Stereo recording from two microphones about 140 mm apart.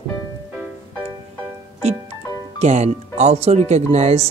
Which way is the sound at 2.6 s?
50° right (ahead or behind).